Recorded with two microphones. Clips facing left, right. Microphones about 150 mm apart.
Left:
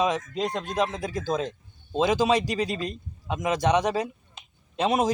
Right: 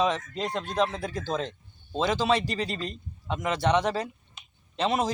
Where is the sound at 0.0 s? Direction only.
15° left (ahead or behind).